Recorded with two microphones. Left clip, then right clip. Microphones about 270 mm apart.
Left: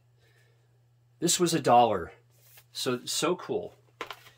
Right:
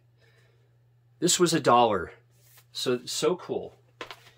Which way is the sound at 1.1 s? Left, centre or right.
Centre.